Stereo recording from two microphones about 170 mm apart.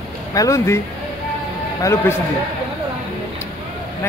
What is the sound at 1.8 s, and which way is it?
Speech, 15° left (ahead or behind).